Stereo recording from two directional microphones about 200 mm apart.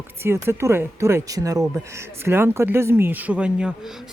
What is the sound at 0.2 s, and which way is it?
Speech, 10° right (ahead or behind).